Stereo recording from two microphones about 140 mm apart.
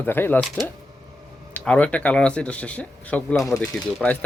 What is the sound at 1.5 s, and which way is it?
Speech, 10° left (ahead or behind).